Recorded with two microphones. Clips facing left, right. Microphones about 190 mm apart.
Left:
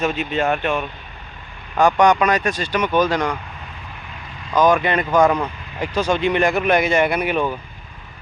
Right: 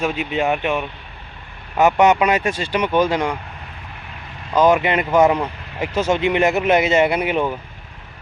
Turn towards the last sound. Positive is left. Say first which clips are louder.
# right 1 dB
turn(degrees=-20)  # may be behind; listen again after turning